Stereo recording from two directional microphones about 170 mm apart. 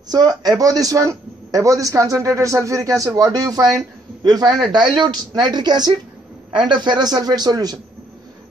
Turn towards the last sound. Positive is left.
turn(degrees=-20)  # may be behind; listen again after turning